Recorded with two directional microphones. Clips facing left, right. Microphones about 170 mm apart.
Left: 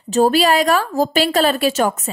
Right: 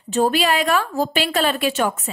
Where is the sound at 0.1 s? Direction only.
40° left (ahead or behind).